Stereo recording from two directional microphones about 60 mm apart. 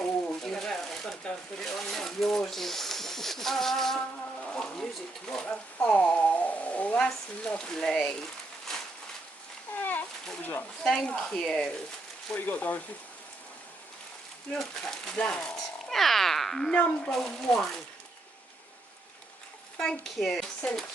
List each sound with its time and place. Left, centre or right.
0.0 s a sound: centre
7.0 s speech: centre
9.7 s a sound: left
10.4 s speech: left
10.8 s speech: centre
12.5 s speech: left
14.5 s speech: centre
19.8 s speech: centre
20.6 s speech: centre